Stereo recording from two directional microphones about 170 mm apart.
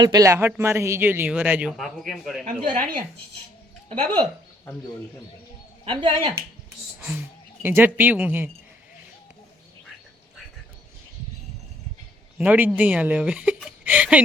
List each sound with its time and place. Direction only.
0.0 s speech: 20° right (ahead or behind); by 2.4 s centre (ahead or behind)
3.8 s speech: 30° right (ahead or behind)
5.8 s speech: 30° right (ahead or behind)
7.0 s speech: 10° right (ahead or behind)
12.4 s speech: 10° right (ahead or behind)